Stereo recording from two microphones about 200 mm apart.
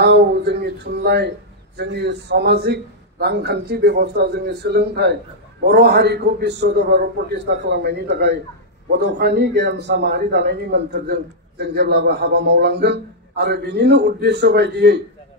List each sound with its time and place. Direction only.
0.0 s a man's voice: 55° right (ahead or behind)